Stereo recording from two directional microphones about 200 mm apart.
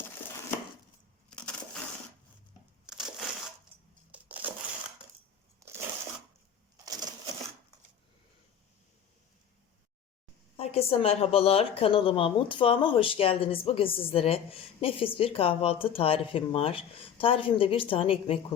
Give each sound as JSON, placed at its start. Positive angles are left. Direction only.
{"t": 1.3, "sound": "crushing", "side_deg": 5}
{"t": 2.8, "sound": "crushing", "side_deg": -5}
{"t": 4.1, "sound": "a sound", "side_deg": -5}
{"t": 5.6, "sound": "a sound", "side_deg": -15}
{"t": 6.8, "sound": "cash register", "side_deg": -20}
{"t": 10.6, "sound": "a woman's voice", "side_deg": 30}